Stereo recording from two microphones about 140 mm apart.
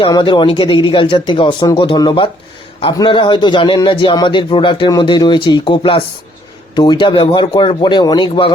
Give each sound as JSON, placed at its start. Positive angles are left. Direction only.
{"t": 0.0, "sound": "speech", "side_deg": 35}